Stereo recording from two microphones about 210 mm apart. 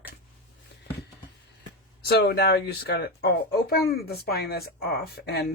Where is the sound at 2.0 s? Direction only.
50° left (ahead or behind).